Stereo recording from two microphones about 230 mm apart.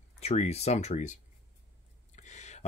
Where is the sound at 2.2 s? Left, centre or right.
Left.